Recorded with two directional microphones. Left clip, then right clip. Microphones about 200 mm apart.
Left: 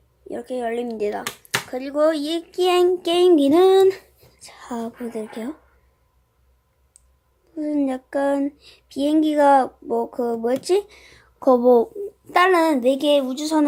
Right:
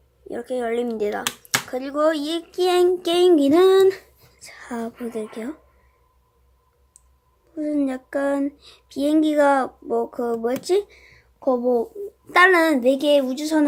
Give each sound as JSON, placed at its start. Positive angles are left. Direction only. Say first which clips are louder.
{"t": 0.3, "sound": "speech", "louder": "right 1 dB", "side_deg": 0}
{"t": 7.5, "sound": "a woman's voice", "louder": "left 1 dB", "side_deg": 5}
{"t": 12.3, "sound": "speech", "louder": "right 1 dB", "side_deg": -5}